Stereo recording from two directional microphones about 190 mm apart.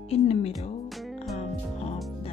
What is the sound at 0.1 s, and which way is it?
Music, 35° left (ahead or behind).